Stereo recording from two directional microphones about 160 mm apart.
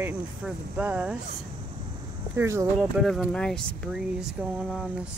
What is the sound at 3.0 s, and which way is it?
Speech, centre (ahead or behind).